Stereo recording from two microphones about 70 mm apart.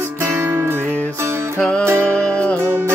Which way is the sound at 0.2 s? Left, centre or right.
Right.